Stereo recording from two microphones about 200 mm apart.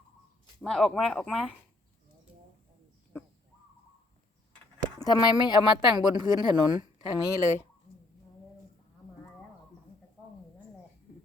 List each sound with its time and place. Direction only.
0.6 s speech: centre (ahead or behind)
4.9 s speech: 20° left (ahead or behind)